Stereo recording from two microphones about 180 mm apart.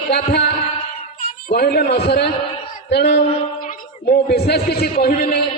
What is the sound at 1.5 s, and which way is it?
A man's voice, 60° left (ahead or behind).